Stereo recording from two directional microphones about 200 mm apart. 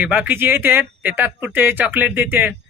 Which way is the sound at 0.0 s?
5° right (ahead or behind).